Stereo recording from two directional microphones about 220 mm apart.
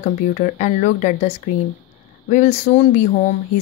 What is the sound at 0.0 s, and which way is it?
Speech, 35° left (ahead or behind).